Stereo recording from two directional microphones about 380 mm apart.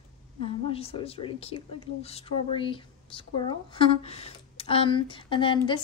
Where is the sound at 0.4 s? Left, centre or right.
Centre.